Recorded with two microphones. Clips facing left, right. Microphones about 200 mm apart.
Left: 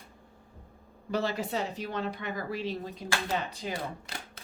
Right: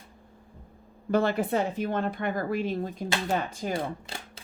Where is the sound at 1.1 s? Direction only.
55° right (ahead or behind).